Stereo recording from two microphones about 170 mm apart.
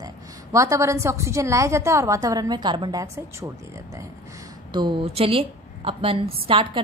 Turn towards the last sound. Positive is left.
turn(degrees=-30)  # may be behind; listen again after turning